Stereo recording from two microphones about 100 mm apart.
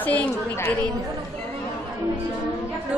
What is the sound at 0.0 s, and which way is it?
Speech, 15° left (ahead or behind).